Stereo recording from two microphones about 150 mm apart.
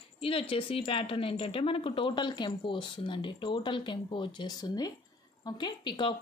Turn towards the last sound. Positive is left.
turn(degrees=30)  # may be behind; listen again after turning